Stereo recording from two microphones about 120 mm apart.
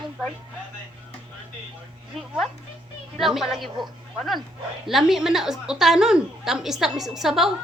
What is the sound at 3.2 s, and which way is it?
A woman's voice, centre (ahead or behind).